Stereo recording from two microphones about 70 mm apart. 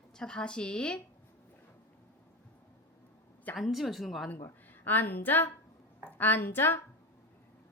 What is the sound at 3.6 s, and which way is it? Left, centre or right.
Speech, centre.